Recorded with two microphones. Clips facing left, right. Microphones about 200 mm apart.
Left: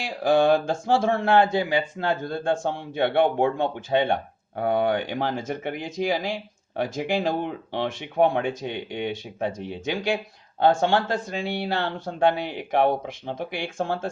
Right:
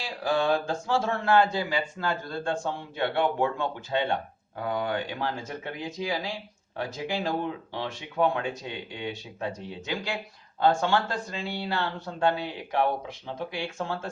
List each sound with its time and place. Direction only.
0.2 s a sound: 50° left (ahead or behind)
0.7 s speech: 55° left (ahead or behind)
5.5 s speech: 85° left
6.7 s speech: 60° left (ahead or behind)